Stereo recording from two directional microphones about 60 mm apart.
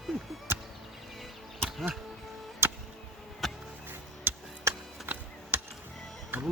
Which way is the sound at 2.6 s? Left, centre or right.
Right.